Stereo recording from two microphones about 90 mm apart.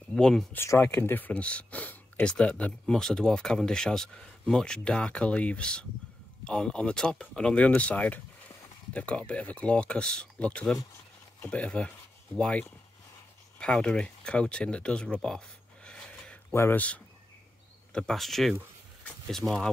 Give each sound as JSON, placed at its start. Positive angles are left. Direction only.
{"t": 0.1, "sound": "speech", "side_deg": 5}
{"t": 0.7, "sound": "speech", "side_deg": 25}
{"t": 15.1, "sound": "a sound", "side_deg": 5}
{"t": 16.5, "sound": "speech", "side_deg": 30}
{"t": 17.9, "sound": "speech", "side_deg": 5}